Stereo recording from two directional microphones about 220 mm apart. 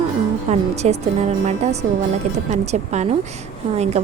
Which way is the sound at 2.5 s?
30° right (ahead or behind).